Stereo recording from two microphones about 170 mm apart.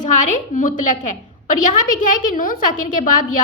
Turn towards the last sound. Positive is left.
turn(degrees=50)  # may be behind; listen again after turning